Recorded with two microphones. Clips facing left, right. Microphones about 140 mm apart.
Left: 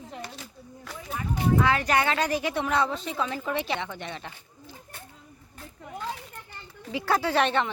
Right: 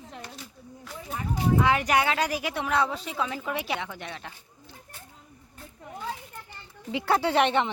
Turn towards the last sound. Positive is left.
turn(degrees=-20)  # may be behind; listen again after turning